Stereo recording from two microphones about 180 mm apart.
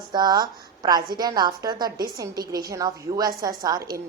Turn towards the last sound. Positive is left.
turn(degrees=-20)  # may be behind; listen again after turning